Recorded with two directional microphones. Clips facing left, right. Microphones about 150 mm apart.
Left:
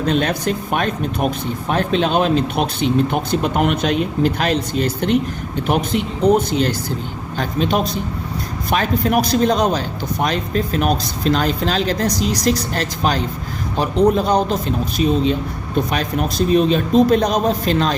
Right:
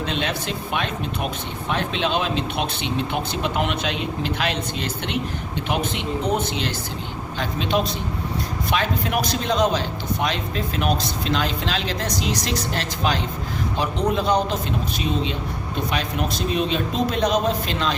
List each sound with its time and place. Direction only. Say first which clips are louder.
0.0 s a man's voice: left 7 dB; 40° left (ahead or behind)